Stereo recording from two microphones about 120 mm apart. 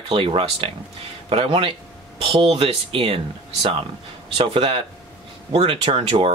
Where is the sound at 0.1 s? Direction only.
50° right (ahead or behind).